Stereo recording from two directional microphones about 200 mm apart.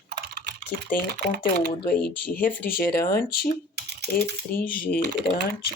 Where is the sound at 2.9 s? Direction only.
50° left (ahead or behind).